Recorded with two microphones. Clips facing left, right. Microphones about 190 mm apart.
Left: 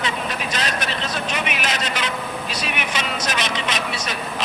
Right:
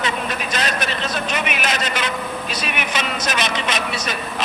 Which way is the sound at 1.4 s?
55° right (ahead or behind).